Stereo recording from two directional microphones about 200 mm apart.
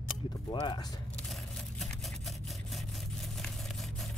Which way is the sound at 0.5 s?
20° left (ahead or behind).